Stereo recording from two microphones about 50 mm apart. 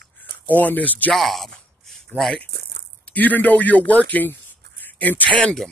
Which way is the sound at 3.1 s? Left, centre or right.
Left.